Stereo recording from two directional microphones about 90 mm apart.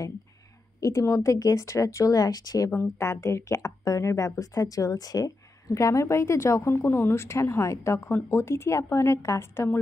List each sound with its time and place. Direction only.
0.7 s speech: 40° left (ahead or behind)
2.7 s speech: 30° left (ahead or behind)